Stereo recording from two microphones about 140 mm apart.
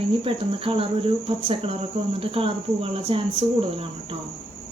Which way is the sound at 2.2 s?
40° right (ahead or behind).